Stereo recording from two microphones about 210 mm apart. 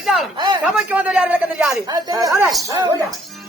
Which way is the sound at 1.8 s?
20° right (ahead or behind).